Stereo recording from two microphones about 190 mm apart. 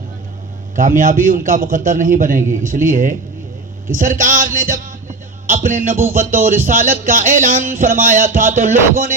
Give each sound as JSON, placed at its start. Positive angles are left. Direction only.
{"t": 0.8, "sound": "a man's voice", "side_deg": -45}